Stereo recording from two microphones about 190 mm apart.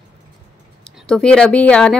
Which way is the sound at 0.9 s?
5° left (ahead or behind).